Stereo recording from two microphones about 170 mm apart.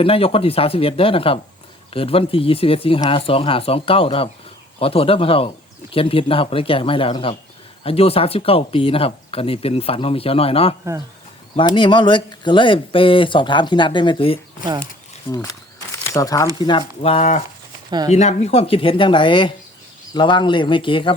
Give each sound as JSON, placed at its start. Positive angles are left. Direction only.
{"t": 0.0, "sound": "speech", "side_deg": 35}